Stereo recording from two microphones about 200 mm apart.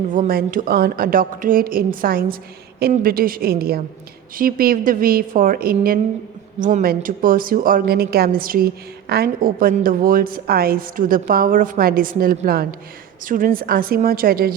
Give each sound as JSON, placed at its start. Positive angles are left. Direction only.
{"t": 0.1, "sound": "a woman's voice", "side_deg": -45}